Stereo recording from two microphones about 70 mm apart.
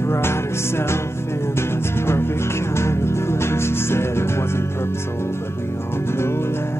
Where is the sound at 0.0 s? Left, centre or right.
Left.